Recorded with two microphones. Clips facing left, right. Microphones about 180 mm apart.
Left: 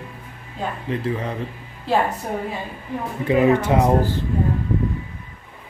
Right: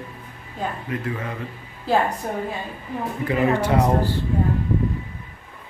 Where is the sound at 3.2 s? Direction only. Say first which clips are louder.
Left 4 dB; 20° left (ahead or behind).